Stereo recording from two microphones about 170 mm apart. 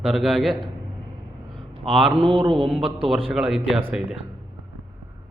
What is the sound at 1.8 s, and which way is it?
Speech, 35° right (ahead or behind).